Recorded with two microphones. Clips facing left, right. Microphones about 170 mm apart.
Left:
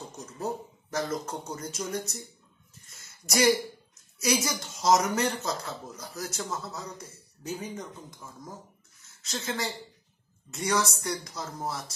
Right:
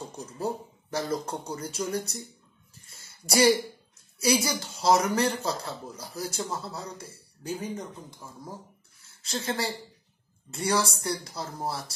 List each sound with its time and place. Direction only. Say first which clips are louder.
0.1 s speech: right 1 dB; 30° right (ahead or behind)
2.9 s a sound: right 3 dB; 30° right (ahead or behind)
3.9 s a man's voice: right 3 dB; 30° right (ahead or behind)
9.0 s speech: right 3 dB; 30° right (ahead or behind)